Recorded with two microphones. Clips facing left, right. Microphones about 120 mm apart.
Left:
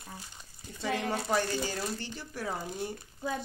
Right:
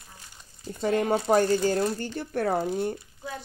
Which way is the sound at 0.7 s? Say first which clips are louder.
Right 8 dB; 55° right (ahead or behind).